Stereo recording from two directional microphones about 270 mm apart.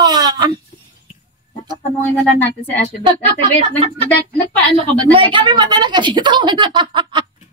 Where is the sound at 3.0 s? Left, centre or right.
Centre.